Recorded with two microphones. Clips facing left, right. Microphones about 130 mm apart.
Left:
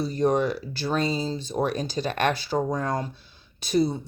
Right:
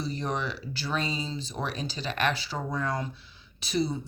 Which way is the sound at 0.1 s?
40° left (ahead or behind).